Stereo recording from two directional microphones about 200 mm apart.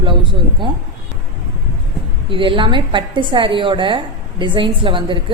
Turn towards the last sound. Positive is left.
turn(degrees=-25)  # may be behind; listen again after turning